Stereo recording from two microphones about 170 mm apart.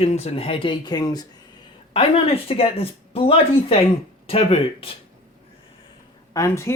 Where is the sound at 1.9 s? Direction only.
35° left (ahead or behind).